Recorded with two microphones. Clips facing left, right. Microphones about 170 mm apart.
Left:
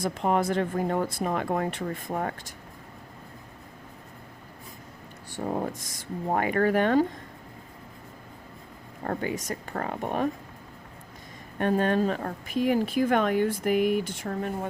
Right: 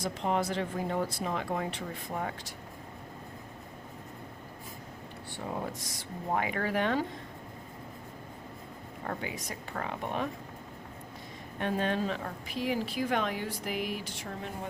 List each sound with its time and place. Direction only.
0.0 s a woman's voice: 50° left (ahead or behind)
5.5 s a woman's voice: 50° left (ahead or behind)
9.0 s a woman's voice: 45° left (ahead or behind)
11.5 s a woman's voice: 50° left (ahead or behind)